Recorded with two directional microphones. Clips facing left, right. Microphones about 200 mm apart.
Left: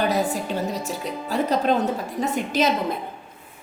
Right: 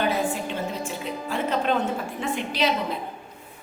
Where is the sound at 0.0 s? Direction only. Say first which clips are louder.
Left 2 dB; 40° left (ahead or behind).